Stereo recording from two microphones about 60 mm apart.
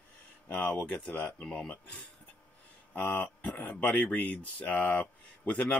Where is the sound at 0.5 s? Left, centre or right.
Left.